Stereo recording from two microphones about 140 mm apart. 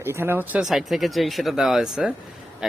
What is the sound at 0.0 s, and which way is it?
Speech, 15° right (ahead or behind).